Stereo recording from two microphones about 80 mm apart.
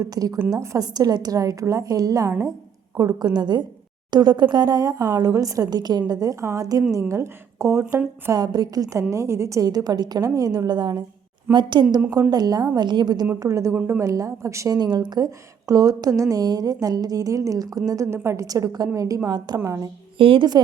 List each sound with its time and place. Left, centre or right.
0.0 s a woman's voice: right
0.9 s a woman's voice: right
12.3 s a woman's voice: right
12.7 s a woman's voice: right
13.4 s a woman's voice: right
13.7 s a woman's voice: right
14.0 s a woman's voice: right
14.8 s a woman's voice: right
18.4 s a woman's voice: right
20.1 s speech: right